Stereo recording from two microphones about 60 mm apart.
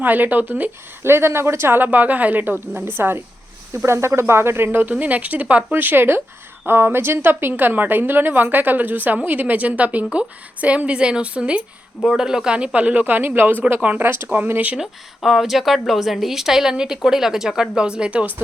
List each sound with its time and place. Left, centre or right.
0.0 s a woman's voice: right
1.0 s a woman's voice: right
14.0 s a woman's voice: right
14.8 s a woman's voice: centre; by 18.3 s right